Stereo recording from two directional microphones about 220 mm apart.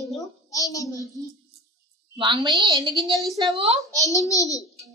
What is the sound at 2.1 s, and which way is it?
A woman's voice, 20° right (ahead or behind).